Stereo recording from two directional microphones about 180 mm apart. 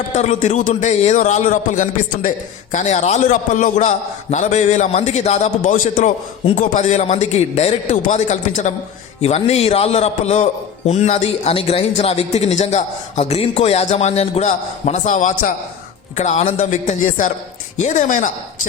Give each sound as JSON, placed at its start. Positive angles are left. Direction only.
{"t": 0.1, "sound": "a man's voice", "side_deg": 40}